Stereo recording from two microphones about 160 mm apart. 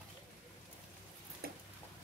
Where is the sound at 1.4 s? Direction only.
70° right (ahead or behind).